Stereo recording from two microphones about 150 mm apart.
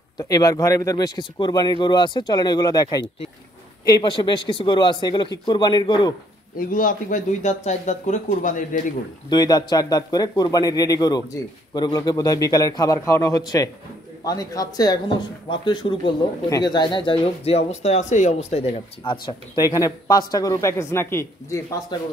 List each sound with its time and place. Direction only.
0.2 s a man's voice: 25° left (ahead or behind)
6.5 s speech: 70° left (ahead or behind)
9.3 s speech: 25° left (ahead or behind); by 19.1 s 45° left (ahead or behind)
19.2 s speech: 30° left (ahead or behind)
21.9 s speech: 30° left (ahead or behind)